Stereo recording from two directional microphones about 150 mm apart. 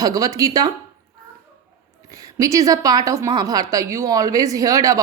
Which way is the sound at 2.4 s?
20° right (ahead or behind).